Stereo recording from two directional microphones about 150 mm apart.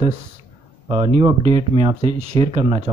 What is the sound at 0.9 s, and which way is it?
A man's voice, 45° right (ahead or behind).